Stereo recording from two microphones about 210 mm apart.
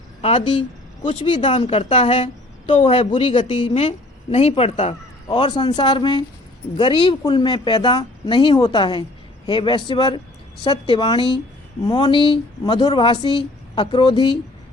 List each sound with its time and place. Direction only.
0.2 s a woman's voice: 25° left (ahead or behind)